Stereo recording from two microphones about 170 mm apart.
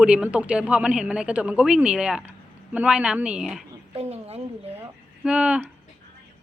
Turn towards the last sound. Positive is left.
turn(degrees=-5)  # may be behind; listen again after turning